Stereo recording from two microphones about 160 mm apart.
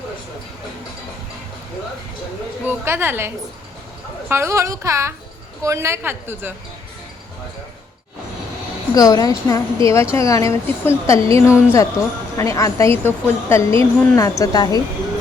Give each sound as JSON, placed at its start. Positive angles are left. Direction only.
{"t": 2.6, "sound": "a woman's voice", "side_deg": -15}
{"t": 9.0, "sound": "a woman's voice", "side_deg": 25}